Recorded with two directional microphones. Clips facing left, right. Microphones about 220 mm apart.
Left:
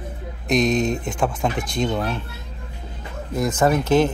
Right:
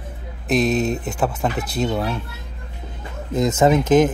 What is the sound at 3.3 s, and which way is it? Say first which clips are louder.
Speech: right 3 dB; 20° right (ahead or behind).